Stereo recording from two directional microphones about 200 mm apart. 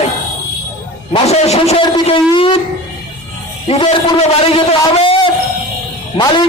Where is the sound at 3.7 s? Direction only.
30° left (ahead or behind).